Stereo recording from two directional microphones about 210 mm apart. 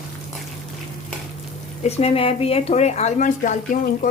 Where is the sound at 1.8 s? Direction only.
30° left (ahead or behind).